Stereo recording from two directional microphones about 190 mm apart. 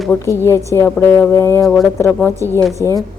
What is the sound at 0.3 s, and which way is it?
A woman's voice, 15° left (ahead or behind).